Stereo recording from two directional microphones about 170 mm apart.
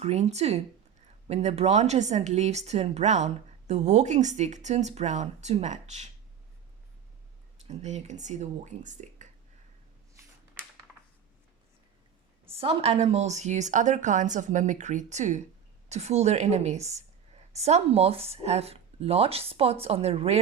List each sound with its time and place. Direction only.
0.0 s speech: 40° right (ahead or behind)
7.7 s speech: 40° right (ahead or behind)
12.5 s speech: 35° right (ahead or behind)